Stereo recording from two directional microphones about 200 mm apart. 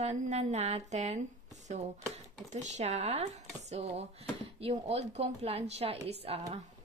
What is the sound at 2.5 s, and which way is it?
Speech, 35° right (ahead or behind).